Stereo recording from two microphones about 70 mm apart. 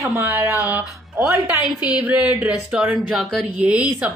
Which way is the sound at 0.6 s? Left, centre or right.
Right.